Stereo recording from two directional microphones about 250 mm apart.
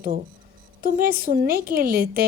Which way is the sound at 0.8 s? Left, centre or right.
Right.